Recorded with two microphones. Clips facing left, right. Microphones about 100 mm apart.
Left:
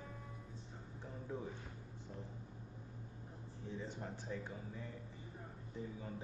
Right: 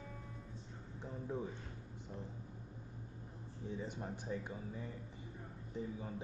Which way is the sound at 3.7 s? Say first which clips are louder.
Right 2 dB; 15° right (ahead or behind).